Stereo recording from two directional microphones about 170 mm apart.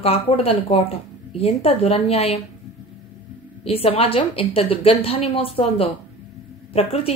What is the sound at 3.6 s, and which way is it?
A woman's voice, 35° left (ahead or behind).